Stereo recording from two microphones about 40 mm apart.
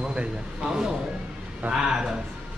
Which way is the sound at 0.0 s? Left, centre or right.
Right.